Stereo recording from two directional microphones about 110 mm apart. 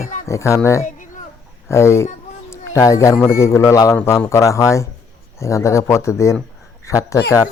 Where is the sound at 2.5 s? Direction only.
30° left (ahead or behind).